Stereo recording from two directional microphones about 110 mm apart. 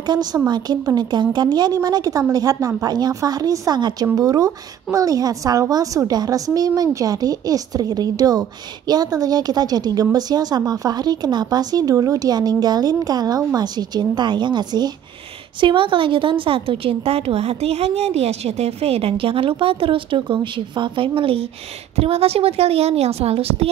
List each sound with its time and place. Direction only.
0.0 s a woman's voice: 40° right (ahead or behind); by 23.7 s 65° right (ahead or behind)